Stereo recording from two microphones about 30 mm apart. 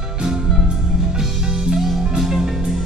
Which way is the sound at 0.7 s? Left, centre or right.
Right.